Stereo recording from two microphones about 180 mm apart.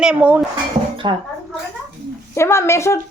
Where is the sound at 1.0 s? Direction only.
25° right (ahead or behind).